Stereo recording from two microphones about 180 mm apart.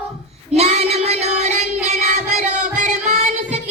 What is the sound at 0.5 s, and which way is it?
Music, 35° right (ahead or behind).